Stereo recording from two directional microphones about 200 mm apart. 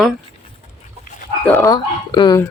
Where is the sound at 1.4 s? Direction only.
15° left (ahead or behind).